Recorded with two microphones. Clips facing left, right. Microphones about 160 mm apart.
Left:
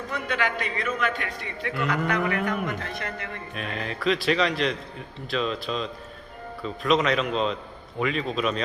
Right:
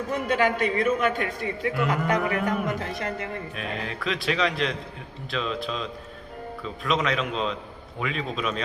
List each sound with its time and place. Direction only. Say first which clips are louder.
0.3 s a man's voice: right 5 dB; 45° right (ahead or behind)
3.5 s a man's voice: even; centre (ahead or behind)